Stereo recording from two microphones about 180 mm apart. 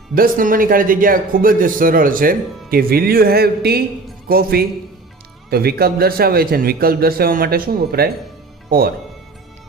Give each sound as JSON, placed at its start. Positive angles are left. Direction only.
{"t": 0.1, "sound": "a man's voice", "side_deg": -50}